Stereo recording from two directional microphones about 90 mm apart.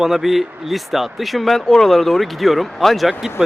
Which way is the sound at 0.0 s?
5° right (ahead or behind).